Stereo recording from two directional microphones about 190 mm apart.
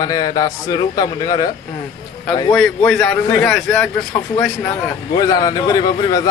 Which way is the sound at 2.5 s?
5° left (ahead or behind).